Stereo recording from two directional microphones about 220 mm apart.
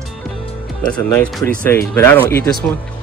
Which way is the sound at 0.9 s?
5° left (ahead or behind).